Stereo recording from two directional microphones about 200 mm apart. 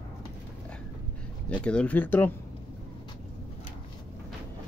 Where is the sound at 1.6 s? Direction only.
5° left (ahead or behind).